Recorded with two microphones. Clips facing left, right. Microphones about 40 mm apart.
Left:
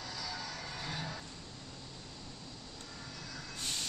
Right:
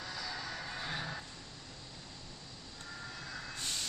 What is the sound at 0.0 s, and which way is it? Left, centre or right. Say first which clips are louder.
Music: right 1 dB; centre.